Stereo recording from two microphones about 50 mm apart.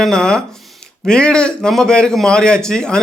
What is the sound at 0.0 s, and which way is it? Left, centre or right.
A man's voice, centre.